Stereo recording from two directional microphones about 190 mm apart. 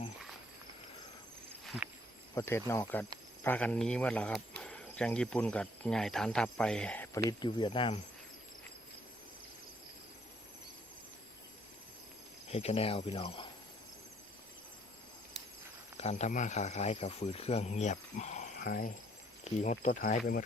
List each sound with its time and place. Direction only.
1.6 s a sound: 5° right (ahead or behind)
2.3 s speech: 10° left (ahead or behind)
7.3 s speech: 20° left (ahead or behind)
12.5 s speech: 35° left (ahead or behind)
16.0 s speech: 35° left (ahead or behind)